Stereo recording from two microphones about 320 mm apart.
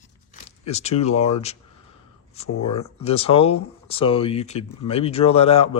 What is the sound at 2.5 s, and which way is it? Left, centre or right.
Speech, left.